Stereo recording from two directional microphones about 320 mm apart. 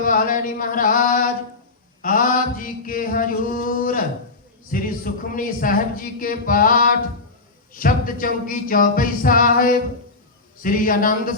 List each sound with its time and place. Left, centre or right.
0.0 s speech: left